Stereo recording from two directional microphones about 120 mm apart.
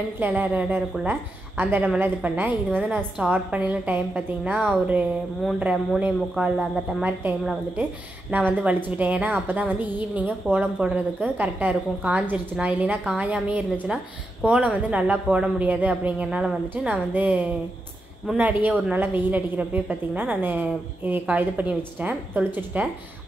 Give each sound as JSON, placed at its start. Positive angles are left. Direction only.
{"t": 0.2, "sound": "a woman's voice", "side_deg": -15}
{"t": 5.6, "sound": "a woman's voice", "side_deg": -10}
{"t": 8.3, "sound": "a woman's voice", "side_deg": -15}